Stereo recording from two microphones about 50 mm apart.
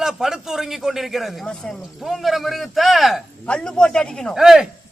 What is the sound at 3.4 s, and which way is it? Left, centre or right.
Speech, left.